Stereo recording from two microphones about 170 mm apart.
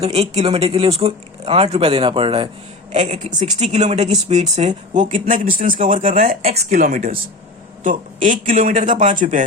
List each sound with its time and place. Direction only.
0.0 s speech: 35° right (ahead or behind)
2.9 s speech: 45° right (ahead or behind)